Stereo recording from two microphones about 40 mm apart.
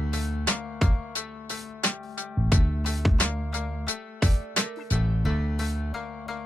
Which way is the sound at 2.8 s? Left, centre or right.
Centre.